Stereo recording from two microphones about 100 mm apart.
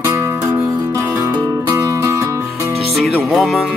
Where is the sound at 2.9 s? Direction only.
Centre (ahead or behind).